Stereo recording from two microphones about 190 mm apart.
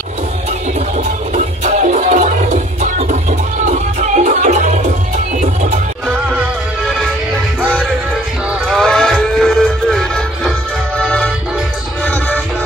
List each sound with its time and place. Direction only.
0.7 s music: 40° right (ahead or behind)
8.6 s music: 5° left (ahead or behind)